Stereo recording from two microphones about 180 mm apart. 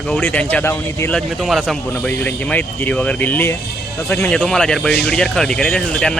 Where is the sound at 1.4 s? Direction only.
Centre (ahead or behind).